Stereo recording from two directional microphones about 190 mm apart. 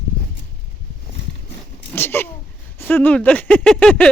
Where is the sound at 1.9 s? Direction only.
10° left (ahead or behind).